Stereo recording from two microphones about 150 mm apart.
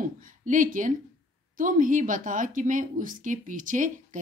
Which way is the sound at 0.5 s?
60° right (ahead or behind).